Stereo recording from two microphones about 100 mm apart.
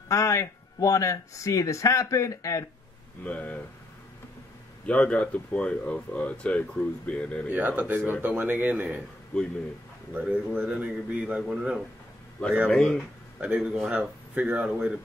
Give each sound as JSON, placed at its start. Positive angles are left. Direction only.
{"t": 0.1, "sound": "speech", "side_deg": 30}
{"t": 3.3, "sound": "speech", "side_deg": 15}
{"t": 4.8, "sound": "speech", "side_deg": 10}
{"t": 7.4, "sound": "speech", "side_deg": -15}
{"t": 10.1, "sound": "speech", "side_deg": -15}
{"t": 12.6, "sound": "speech", "side_deg": 5}
{"t": 13.4, "sound": "speech", "side_deg": -10}